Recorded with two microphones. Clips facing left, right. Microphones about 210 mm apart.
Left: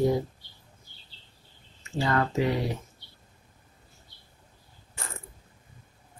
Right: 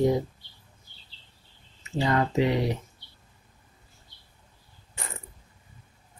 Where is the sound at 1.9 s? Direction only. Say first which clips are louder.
Right 1 dB; 20° right (ahead or behind).